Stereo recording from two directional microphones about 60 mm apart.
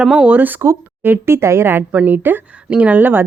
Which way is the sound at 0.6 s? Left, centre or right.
Right.